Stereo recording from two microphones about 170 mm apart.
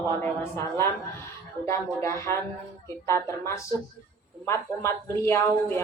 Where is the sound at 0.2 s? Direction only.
15° left (ahead or behind).